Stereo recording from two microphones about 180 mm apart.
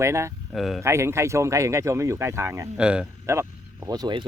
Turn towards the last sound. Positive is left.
turn(degrees=-25)  # may be behind; listen again after turning